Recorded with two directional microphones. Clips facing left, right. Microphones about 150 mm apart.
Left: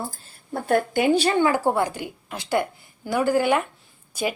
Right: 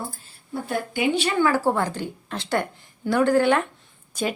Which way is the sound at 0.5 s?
50° left (ahead or behind).